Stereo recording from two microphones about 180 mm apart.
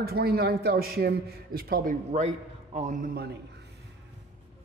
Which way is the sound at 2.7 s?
40° right (ahead or behind).